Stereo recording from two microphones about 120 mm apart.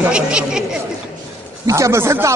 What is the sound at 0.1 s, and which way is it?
Speech, 5° right (ahead or behind).